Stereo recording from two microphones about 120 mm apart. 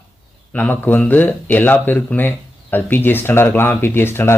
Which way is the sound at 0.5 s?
15° left (ahead or behind).